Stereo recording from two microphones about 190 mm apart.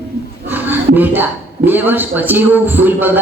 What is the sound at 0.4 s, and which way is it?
Speech, 10° right (ahead or behind).